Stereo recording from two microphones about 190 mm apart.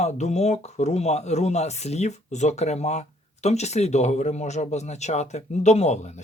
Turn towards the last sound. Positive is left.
turn(degrees=35)  # may be behind; listen again after turning